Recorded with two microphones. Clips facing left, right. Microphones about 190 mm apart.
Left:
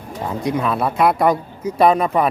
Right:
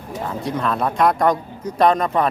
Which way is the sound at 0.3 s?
10° left (ahead or behind).